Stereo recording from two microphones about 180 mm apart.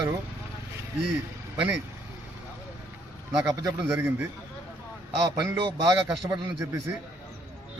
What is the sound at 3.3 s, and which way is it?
Speech, 20° right (ahead or behind).